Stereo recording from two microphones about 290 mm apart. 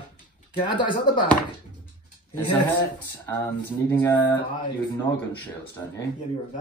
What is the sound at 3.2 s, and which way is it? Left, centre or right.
Speech, centre.